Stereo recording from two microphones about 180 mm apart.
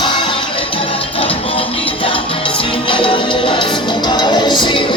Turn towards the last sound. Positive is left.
turn(degrees=25)  # may be behind; listen again after turning